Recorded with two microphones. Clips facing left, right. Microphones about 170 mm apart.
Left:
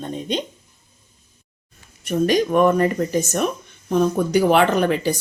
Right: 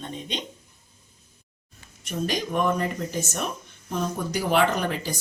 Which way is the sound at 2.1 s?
65° left (ahead or behind).